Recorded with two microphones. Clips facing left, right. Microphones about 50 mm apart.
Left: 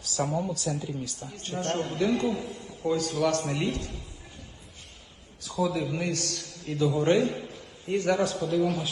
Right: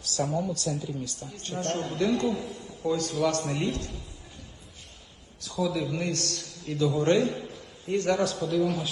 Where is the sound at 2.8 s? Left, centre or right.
Left.